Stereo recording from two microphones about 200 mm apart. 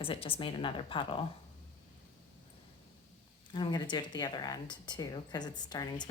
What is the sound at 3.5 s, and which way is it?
A woman's voice, 20° left (ahead or behind).